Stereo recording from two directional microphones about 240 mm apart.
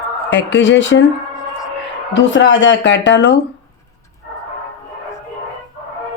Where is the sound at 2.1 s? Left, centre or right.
Left.